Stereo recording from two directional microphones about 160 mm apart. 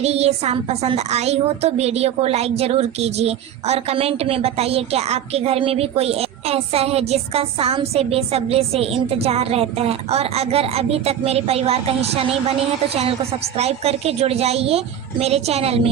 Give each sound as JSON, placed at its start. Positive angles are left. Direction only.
{"t": 0.0, "sound": "a woman's voice", "side_deg": -40}